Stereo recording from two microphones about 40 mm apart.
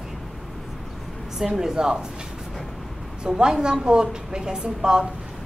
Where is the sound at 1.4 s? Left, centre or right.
Centre.